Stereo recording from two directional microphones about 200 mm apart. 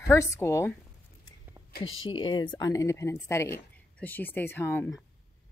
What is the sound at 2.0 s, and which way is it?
A woman's voice, 25° left (ahead or behind).